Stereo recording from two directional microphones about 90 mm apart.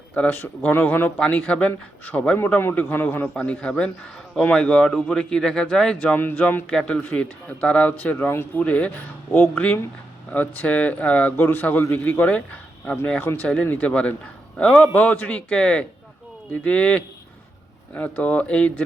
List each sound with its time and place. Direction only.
0.1 s a man's voice: 20° left (ahead or behind)
6.7 s a man's voice: 10° left (ahead or behind)